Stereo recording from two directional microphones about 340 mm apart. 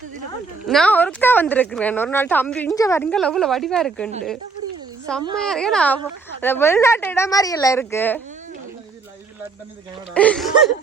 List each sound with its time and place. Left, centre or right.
0.7 s a woman's voice: centre
10.2 s a woman's voice: centre